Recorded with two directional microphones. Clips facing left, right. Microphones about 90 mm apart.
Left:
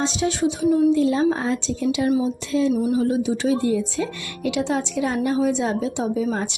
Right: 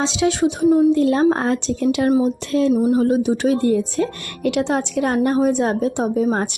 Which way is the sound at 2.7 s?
45° right (ahead or behind).